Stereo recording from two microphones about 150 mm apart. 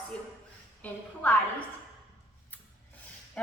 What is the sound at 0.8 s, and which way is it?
Speech, 10° left (ahead or behind).